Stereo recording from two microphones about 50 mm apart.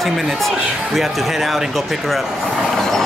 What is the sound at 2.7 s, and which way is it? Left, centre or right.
Vehicle, centre.